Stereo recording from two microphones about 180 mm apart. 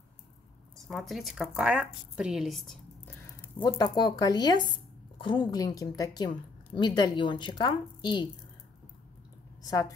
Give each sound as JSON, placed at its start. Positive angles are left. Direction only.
{"t": 0.7, "sound": "speech", "side_deg": 0}
{"t": 3.6, "sound": "a woman's voice", "side_deg": 20}
{"t": 9.7, "sound": "a woman's voice", "side_deg": 20}